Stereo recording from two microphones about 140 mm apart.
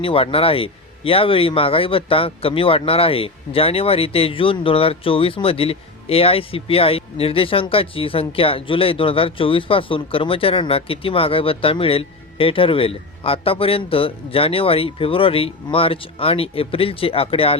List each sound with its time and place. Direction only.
0.0 s speech: 40° left (ahead or behind)